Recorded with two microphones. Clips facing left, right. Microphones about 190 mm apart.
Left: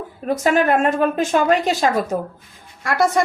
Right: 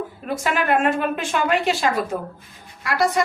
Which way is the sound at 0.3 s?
40° left (ahead or behind).